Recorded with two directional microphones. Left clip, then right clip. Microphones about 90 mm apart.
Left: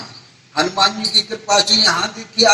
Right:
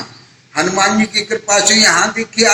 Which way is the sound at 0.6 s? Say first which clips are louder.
Right 2 dB; 25° right (ahead or behind).